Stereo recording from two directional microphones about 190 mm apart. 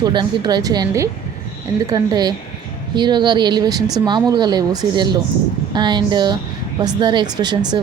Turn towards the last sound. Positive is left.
turn(degrees=-20)  # may be behind; listen again after turning